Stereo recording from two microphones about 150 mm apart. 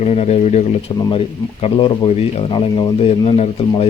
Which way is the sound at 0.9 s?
35° left (ahead or behind).